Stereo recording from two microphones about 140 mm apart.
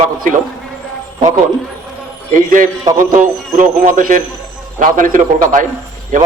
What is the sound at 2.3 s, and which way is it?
A man's voice, 70° right (ahead or behind).